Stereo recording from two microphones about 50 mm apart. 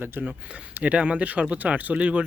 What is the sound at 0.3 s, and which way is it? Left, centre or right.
Speech, right.